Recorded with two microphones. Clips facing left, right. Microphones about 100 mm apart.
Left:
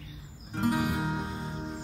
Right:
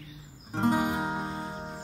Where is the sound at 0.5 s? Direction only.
30° right (ahead or behind).